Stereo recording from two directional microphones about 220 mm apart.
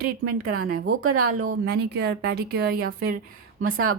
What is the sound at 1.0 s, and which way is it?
Speech, 90° right.